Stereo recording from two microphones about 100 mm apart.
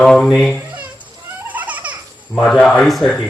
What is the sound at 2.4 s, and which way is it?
Speech, 5° left (ahead or behind).